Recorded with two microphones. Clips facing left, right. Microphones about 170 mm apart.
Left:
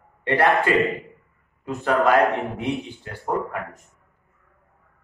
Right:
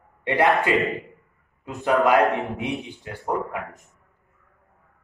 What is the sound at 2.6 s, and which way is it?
Speech, 20° right (ahead or behind).